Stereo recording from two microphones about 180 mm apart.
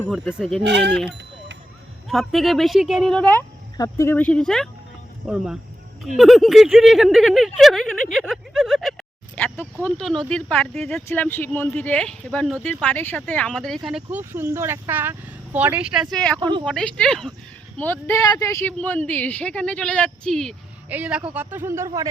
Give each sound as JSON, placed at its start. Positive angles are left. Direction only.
{"t": 0.1, "sound": "speech", "side_deg": 0}
{"t": 0.6, "sound": "speech", "side_deg": -70}
{"t": 2.0, "sound": "speech", "side_deg": 0}
{"t": 3.8, "sound": "speech", "side_deg": 15}
{"t": 8.1, "sound": "a sound", "side_deg": 0}
{"t": 9.8, "sound": "speech", "side_deg": 5}
{"t": 16.4, "sound": "speech", "side_deg": -25}
{"t": 16.6, "sound": "speech", "side_deg": 5}
{"t": 20.9, "sound": "speech", "side_deg": -10}